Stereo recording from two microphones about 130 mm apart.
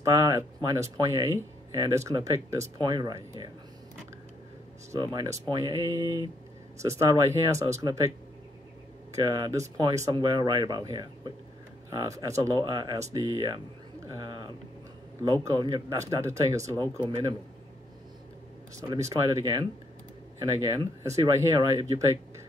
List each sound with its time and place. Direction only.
0.0 s speech: 25° right (ahead or behind)
4.9 s speech: 30° right (ahead or behind)
9.1 s speech: 30° right (ahead or behind)
14.0 s a sound: 35° right (ahead or behind)
15.4 s speech: 30° right (ahead or behind)
18.9 s speech: 25° right (ahead or behind)